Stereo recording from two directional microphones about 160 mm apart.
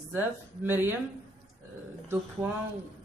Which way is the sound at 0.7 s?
15° right (ahead or behind).